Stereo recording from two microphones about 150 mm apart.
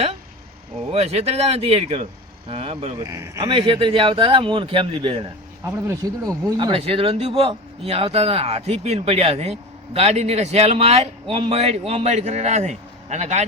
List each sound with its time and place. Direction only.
0.9 s speech: 40° right (ahead or behind)
3.0 s speech: 20° right (ahead or behind)
3.5 s speech: 35° right (ahead or behind)
5.6 s speech: 20° right (ahead or behind)
6.6 s speech: 35° right (ahead or behind)